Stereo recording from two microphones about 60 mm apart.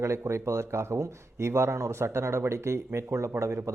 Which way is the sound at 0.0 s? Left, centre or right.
Right.